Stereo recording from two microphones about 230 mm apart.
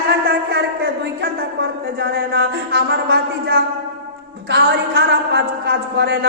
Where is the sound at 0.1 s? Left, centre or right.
Right.